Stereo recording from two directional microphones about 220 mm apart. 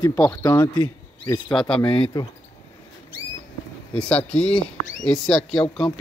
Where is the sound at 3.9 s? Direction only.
5° left (ahead or behind).